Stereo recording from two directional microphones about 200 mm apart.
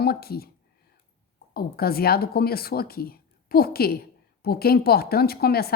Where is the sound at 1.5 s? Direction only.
50° left (ahead or behind).